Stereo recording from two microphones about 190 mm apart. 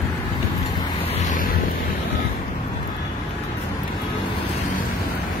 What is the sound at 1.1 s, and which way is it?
Waves, 45° left (ahead or behind).